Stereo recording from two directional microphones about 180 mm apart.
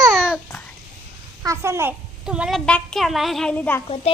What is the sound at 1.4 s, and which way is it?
A child's voice, 15° right (ahead or behind).